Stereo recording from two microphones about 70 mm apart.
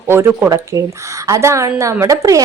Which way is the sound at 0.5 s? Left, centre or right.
Right.